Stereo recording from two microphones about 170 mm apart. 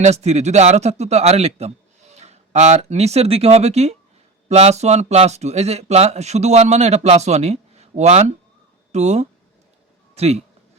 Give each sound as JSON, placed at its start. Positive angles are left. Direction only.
{"t": 0.0, "sound": "a man's voice", "side_deg": -40}